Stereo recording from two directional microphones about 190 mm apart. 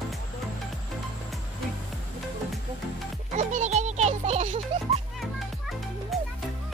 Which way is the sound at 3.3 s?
40° right (ahead or behind).